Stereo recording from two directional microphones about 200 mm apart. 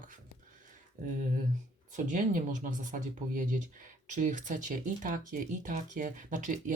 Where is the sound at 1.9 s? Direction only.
40° right (ahead or behind).